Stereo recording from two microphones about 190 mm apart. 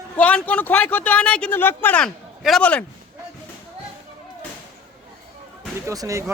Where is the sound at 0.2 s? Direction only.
5° left (ahead or behind).